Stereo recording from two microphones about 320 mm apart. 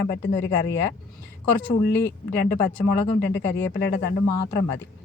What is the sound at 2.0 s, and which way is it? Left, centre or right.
Speech, left.